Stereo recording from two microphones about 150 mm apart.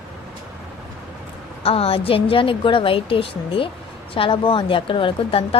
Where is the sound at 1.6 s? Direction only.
40° left (ahead or behind).